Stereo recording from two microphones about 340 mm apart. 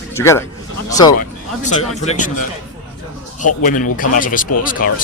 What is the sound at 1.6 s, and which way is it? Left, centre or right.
Speech, left.